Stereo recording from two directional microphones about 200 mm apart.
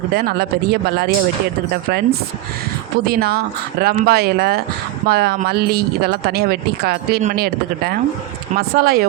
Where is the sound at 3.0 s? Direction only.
50° right (ahead or behind).